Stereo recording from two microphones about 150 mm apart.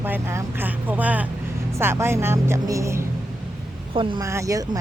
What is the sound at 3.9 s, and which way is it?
Speech, 35° right (ahead or behind).